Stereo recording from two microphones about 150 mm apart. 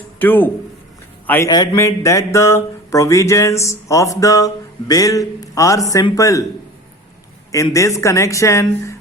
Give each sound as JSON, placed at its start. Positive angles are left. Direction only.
{"t": 0.2, "sound": "speech", "side_deg": 10}
{"t": 7.5, "sound": "speech", "side_deg": 20}